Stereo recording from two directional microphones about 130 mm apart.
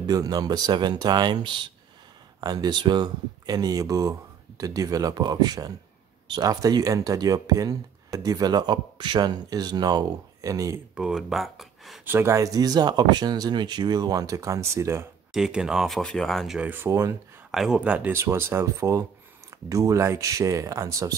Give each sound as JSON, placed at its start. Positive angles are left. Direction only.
{"t": 0.0, "sound": "speech", "side_deg": -30}
{"t": 11.0, "sound": "speech", "side_deg": -5}
{"t": 12.0, "sound": "speech", "side_deg": -15}
{"t": 15.3, "sound": "speech", "side_deg": -5}
{"t": 16.5, "sound": "speech", "side_deg": -15}
{"t": 17.5, "sound": "speech", "side_deg": -5}